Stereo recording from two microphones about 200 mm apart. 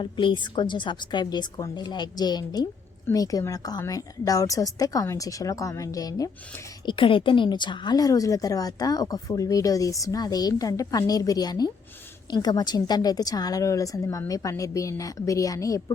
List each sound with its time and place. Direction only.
0.0 s a woman's voice: 25° left (ahead or behind)